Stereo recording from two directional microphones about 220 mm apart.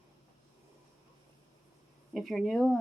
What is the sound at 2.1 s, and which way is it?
Speech, centre (ahead or behind).